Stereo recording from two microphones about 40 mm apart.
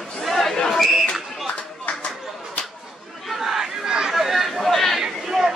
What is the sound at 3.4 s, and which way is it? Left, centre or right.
Crowd, centre.